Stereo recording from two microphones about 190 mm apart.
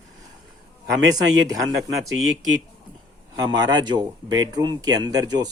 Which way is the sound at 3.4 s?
20° right (ahead or behind).